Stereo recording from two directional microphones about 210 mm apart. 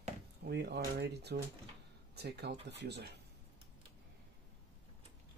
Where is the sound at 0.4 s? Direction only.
50° right (ahead or behind).